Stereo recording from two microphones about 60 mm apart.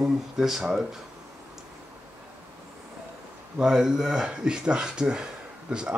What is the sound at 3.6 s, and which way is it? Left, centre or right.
Speech, centre.